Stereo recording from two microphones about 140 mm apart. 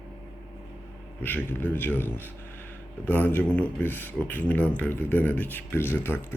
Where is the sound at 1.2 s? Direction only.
15° left (ahead or behind).